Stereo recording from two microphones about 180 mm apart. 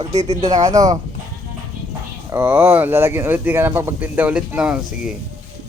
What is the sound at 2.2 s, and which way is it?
Speech, 10° right (ahead or behind).